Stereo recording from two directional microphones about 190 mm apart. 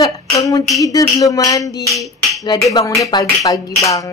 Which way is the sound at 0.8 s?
20° left (ahead or behind).